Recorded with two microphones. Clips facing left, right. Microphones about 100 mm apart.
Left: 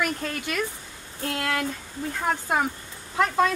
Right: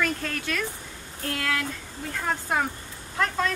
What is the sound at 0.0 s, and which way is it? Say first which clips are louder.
A woman's voice: even; 15° left (ahead or behind).